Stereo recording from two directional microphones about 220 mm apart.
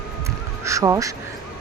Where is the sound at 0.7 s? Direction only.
15° right (ahead or behind).